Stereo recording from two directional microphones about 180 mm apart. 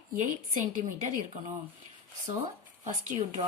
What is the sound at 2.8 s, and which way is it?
Speech, 40° right (ahead or behind).